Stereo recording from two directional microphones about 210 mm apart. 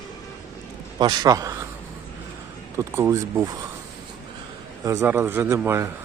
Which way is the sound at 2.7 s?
10° right (ahead or behind).